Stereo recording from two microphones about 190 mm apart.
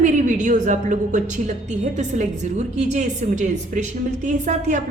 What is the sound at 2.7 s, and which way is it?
A woman's voice, 40° right (ahead or behind).